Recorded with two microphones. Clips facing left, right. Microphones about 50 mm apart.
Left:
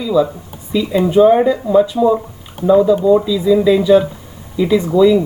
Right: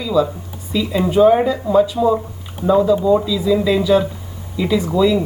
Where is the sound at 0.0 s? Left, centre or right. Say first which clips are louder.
Left 2 dB; centre.